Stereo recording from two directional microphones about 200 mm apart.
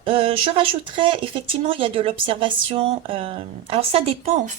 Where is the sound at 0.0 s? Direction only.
30° right (ahead or behind).